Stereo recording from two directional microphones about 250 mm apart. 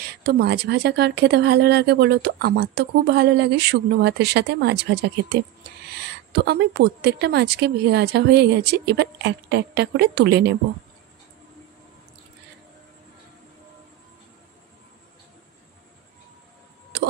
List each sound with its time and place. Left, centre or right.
0.0 s a woman's voice: right
16.9 s tick-tock: right